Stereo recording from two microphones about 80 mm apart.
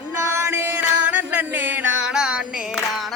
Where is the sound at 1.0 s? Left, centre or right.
Right.